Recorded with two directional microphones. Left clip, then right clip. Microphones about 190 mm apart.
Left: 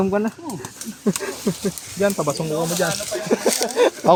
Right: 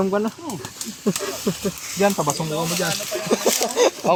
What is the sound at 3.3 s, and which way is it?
Speech, 40° left (ahead or behind).